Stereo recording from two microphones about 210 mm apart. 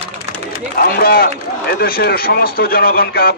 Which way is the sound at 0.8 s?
45° left (ahead or behind).